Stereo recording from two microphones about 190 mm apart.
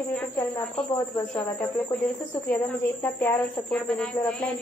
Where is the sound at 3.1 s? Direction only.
5° left (ahead or behind).